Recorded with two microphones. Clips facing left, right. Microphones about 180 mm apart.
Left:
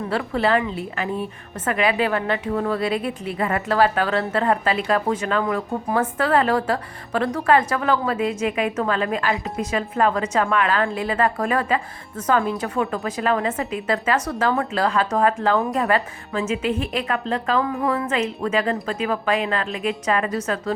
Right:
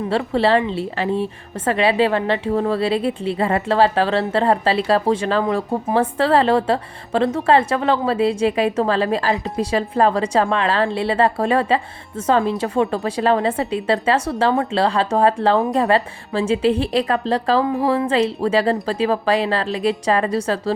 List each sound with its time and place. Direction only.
0.1 s a woman's voice: 30° right (ahead or behind)